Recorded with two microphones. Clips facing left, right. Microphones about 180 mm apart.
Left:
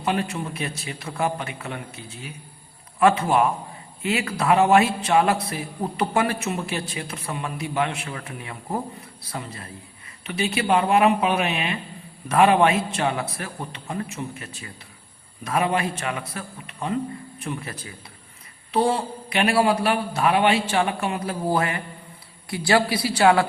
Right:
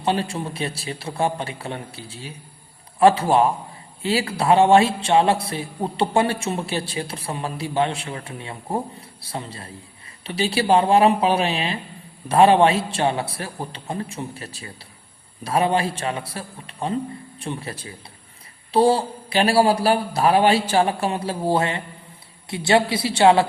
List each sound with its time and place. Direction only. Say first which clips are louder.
0.0 s a man's voice: right 2 dB; 30° right (ahead or behind)